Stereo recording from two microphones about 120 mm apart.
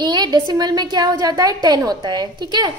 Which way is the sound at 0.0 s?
35° right (ahead or behind).